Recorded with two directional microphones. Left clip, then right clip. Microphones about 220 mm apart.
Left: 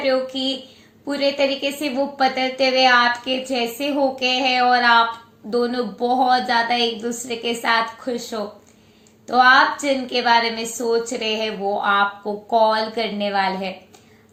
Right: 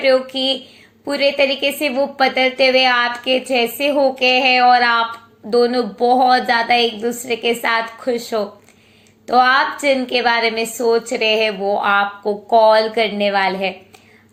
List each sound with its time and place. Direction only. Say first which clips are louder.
0.0 s a woman's voice: right 5 dB; 35° right (ahead or behind)